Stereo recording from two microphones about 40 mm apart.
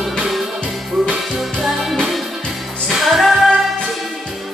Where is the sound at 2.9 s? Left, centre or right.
Centre.